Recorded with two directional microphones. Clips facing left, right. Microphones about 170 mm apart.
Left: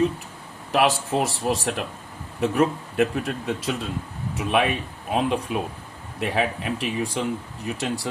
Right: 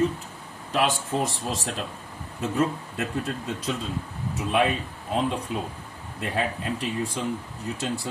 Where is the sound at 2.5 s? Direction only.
80° left.